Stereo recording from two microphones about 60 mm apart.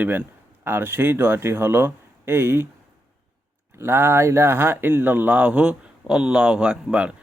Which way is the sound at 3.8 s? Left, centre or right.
Right.